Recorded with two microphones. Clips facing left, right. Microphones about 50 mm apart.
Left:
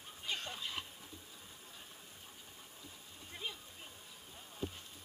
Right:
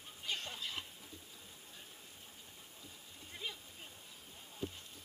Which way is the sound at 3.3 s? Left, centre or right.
Centre.